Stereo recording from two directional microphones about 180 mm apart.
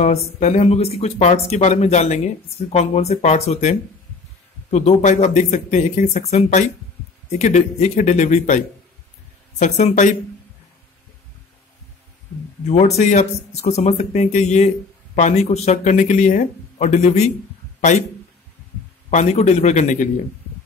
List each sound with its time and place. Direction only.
0.0 s speech: 40° left (ahead or behind)
12.6 s speech: 40° left (ahead or behind)
19.0 s speech: 40° left (ahead or behind)